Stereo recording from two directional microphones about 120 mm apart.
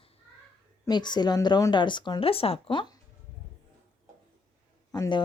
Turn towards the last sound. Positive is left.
turn(degrees=35)  # may be behind; listen again after turning